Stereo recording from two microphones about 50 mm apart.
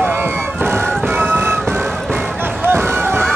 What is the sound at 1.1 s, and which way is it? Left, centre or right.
Music, right.